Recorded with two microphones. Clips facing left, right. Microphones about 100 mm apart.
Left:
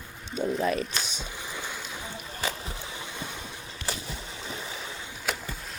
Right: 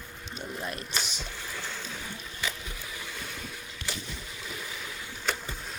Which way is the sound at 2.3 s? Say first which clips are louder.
Left 4 dB; 35° left (ahead or behind).